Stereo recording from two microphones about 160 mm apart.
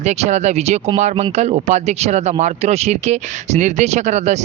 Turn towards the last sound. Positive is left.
turn(degrees=-45)  # may be behind; listen again after turning